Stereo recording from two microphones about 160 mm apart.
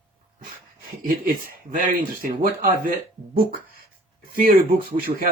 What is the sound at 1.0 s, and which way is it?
Speech, 65° right (ahead or behind).